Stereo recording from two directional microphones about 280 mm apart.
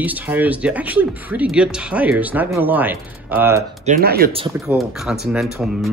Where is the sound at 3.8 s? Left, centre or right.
Right.